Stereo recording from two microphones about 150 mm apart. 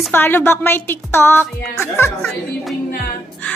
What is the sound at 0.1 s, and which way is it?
A woman's voice, 15° left (ahead or behind).